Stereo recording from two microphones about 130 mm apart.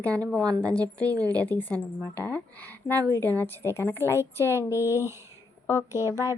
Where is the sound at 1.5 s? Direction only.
15° left (ahead or behind).